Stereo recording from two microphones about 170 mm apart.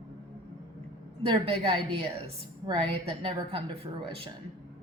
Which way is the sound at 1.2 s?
35° right (ahead or behind).